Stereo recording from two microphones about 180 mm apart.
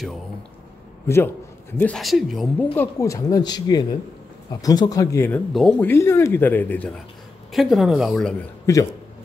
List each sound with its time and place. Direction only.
1.0 s a man's voice: 15° left (ahead or behind)
2.7 s speech: 15° left (ahead or behind)
5.5 s speech: 5° left (ahead or behind)
7.5 s speech: centre (ahead or behind)